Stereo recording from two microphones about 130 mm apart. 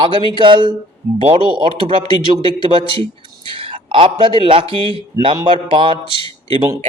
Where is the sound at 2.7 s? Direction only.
45° right (ahead or behind).